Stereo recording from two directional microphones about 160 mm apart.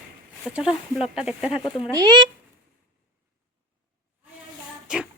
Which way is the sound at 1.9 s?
25° right (ahead or behind).